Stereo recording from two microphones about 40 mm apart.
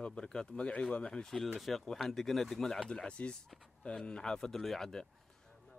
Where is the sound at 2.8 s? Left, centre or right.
Left; by 5.0 s centre.